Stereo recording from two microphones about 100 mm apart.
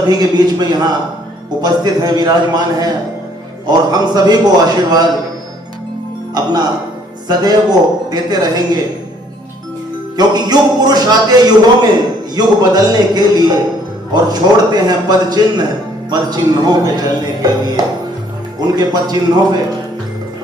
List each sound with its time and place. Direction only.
0.1 s speech: 40° right (ahead or behind)
6.3 s speech: 45° right (ahead or behind)
10.2 s speech: 45° right (ahead or behind)